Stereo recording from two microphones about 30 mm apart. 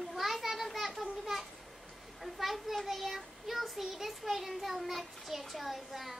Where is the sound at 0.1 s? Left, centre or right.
Centre.